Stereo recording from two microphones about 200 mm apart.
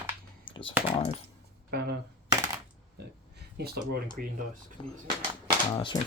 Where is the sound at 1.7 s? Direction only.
55° right (ahead or behind).